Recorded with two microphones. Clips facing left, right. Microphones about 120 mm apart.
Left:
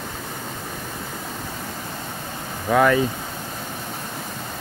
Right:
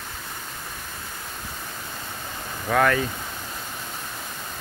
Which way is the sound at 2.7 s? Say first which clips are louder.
Left 4 dB; 10° left (ahead or behind).